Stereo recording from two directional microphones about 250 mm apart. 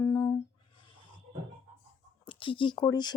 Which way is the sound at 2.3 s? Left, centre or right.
Centre.